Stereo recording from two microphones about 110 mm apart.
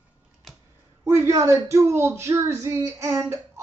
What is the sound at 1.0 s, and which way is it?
Speech, 25° right (ahead or behind).